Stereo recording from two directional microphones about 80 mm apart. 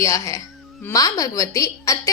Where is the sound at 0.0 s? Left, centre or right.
Left.